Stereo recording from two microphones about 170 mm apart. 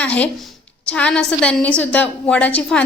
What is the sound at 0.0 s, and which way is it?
A woman's voice, 10° left (ahead or behind).